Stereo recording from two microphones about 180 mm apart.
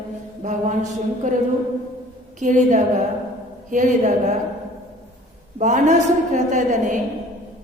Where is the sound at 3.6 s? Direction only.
45° right (ahead or behind).